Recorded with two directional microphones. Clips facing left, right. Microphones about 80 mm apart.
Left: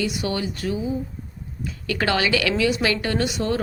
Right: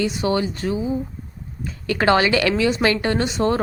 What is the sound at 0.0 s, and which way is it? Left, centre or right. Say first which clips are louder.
Speech: right 4 dB; right.